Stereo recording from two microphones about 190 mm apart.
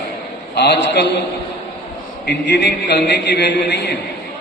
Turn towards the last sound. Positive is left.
turn(degrees=60)  # may be behind; listen again after turning